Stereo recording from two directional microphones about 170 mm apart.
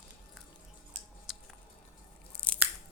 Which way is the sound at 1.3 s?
Centre (ahead or behind).